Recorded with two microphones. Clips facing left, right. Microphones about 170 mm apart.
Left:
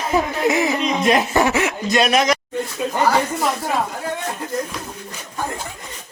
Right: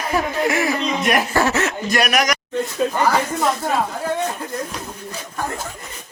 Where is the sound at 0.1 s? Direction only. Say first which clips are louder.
Left 2 dB; 20° left (ahead or behind).